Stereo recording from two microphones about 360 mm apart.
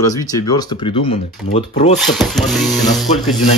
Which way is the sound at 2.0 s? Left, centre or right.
Centre.